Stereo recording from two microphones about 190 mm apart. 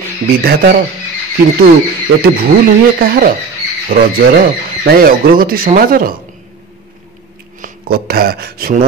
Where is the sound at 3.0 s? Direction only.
50° right (ahead or behind).